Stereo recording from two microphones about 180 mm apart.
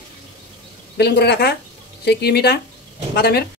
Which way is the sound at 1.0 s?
60° left (ahead or behind).